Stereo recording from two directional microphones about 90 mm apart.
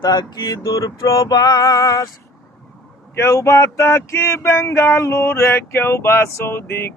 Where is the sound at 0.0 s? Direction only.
45° left (ahead or behind).